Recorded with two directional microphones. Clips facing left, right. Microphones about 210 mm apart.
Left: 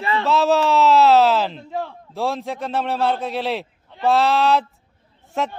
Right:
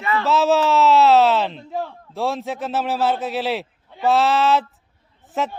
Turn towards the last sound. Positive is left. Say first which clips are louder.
# even
turn(degrees=0)  # may be behind; listen again after turning